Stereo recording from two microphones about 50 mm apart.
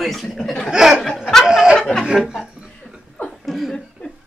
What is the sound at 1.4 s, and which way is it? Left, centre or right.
Snicker, centre.